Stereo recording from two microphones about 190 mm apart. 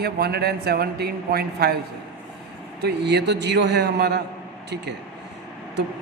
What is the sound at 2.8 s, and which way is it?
Speech, 60° right (ahead or behind).